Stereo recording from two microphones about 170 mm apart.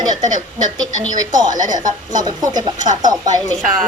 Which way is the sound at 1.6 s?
50° right (ahead or behind).